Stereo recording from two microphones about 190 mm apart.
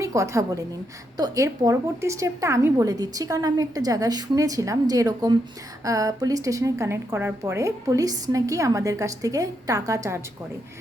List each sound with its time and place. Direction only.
0.0 s a woman's voice: 15° right (ahead or behind)